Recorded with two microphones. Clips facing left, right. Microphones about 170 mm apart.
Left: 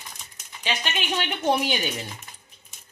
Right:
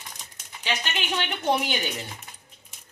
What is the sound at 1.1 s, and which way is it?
Speech, 15° left (ahead or behind).